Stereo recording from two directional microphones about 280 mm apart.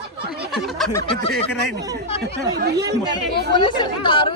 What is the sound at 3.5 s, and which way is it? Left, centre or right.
Speech, centre.